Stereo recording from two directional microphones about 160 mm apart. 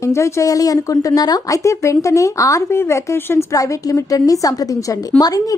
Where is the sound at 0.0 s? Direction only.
20° left (ahead or behind).